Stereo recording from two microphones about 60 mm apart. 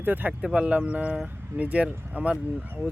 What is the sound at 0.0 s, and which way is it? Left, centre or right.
Speech, right.